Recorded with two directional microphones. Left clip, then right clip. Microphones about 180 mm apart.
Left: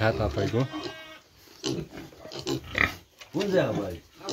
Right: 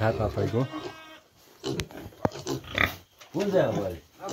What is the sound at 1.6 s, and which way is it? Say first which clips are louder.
Pig: even; 20° left (ahead or behind).